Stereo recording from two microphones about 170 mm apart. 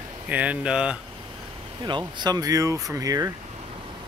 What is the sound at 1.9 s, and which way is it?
Speech, 25° right (ahead or behind).